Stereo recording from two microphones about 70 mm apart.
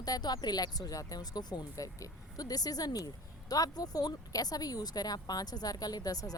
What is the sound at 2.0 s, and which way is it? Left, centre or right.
Speech, left.